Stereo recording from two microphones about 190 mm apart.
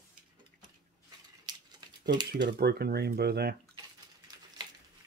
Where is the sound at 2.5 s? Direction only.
60° right (ahead or behind).